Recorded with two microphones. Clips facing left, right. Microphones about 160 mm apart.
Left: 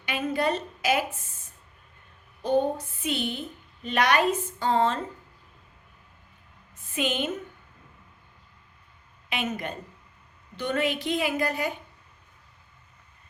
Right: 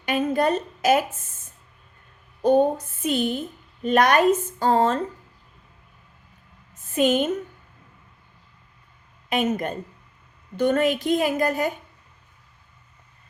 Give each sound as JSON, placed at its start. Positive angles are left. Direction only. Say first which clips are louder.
{"t": 0.0, "sound": "a sound", "louder": "right 5 dB", "side_deg": -45}
{"t": 2.4, "sound": "a woman's voice", "louder": "right 6 dB", "side_deg": -45}
{"t": 6.9, "sound": "a woman's voice", "louder": "right 8 dB", "side_deg": -45}
{"t": 9.3, "sound": "a woman's voice", "louder": "right 7 dB", "side_deg": -45}